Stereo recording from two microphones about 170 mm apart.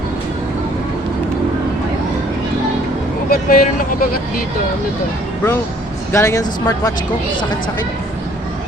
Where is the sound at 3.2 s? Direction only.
55° left (ahead or behind).